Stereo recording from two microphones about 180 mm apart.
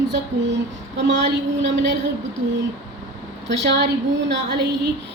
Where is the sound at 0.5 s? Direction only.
75° right (ahead or behind).